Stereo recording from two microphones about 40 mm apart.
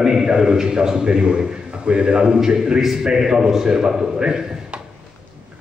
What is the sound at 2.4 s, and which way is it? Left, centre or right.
A man's voice, centre.